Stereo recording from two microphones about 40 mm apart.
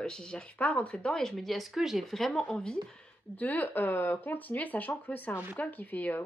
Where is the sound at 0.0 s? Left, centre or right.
Left.